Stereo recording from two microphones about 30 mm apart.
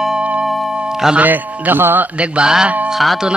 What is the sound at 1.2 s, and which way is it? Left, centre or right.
Speech, right.